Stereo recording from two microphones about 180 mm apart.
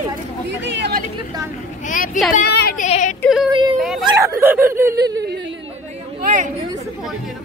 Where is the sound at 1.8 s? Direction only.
45° left (ahead or behind).